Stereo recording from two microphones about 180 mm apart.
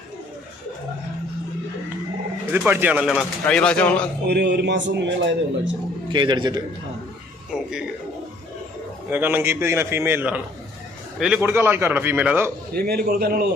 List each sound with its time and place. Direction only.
2.5 s speech: 10° right (ahead or behind); by 4.1 s 5° left (ahead or behind)
4.3 s speech: 65° right (ahead or behind); by 5.7 s 80° right
6.1 s a man's voice: 25° right (ahead or behind)
7.5 s speech: 5° right (ahead or behind)
9.0 s a man's voice: 10° right (ahead or behind)
11.4 s a man's voice: 15° right (ahead or behind)
12.7 s a man's voice: 60° right (ahead or behind)